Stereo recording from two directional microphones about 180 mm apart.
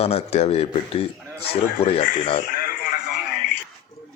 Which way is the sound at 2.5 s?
55° left (ahead or behind).